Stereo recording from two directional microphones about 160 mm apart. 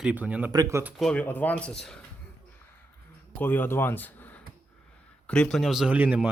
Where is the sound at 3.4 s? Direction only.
10° left (ahead or behind).